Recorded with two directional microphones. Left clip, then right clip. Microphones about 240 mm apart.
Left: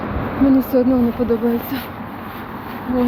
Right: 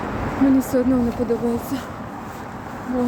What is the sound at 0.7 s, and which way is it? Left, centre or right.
Speech, centre.